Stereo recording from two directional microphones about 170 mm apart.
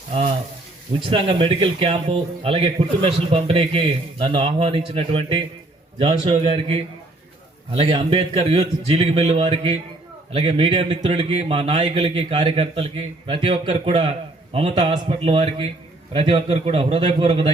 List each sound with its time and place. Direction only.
1.0 s a man's voice: 30° right (ahead or behind)